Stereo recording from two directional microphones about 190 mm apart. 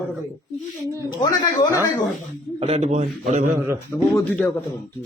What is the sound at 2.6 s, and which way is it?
Speech, 35° right (ahead or behind).